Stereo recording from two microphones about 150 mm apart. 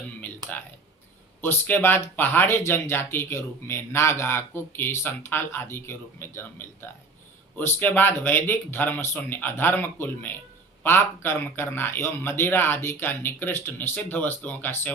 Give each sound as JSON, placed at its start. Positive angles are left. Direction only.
{"t": 1.4, "sound": "speech", "side_deg": 15}
{"t": 7.5, "sound": "speech", "side_deg": 10}